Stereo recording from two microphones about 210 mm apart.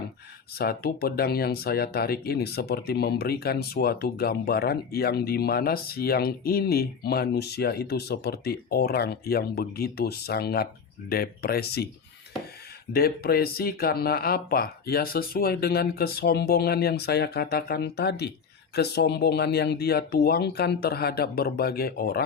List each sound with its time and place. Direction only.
0.5 s speech: 45° left (ahead or behind)
12.9 s speech: 45° left (ahead or behind)